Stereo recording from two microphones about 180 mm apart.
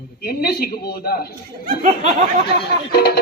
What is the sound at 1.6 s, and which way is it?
Speech, 40° right (ahead or behind).